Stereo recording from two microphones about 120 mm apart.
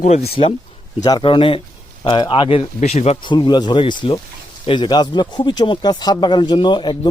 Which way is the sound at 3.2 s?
40° left (ahead or behind).